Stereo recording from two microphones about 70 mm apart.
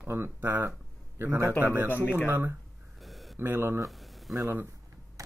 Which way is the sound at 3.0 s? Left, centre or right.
Centre.